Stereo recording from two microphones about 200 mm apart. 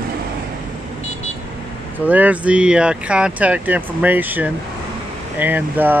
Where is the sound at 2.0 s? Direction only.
10° right (ahead or behind).